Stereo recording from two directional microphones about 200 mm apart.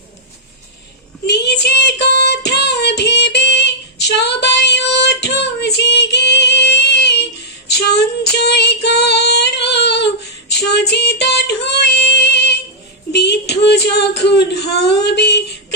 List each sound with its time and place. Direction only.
1.3 s child singing: 55° left (ahead or behind)
7.7 s female singing: 55° left (ahead or behind)
10.6 s child singing: 55° left (ahead or behind)
13.1 s female singing: 55° left (ahead or behind)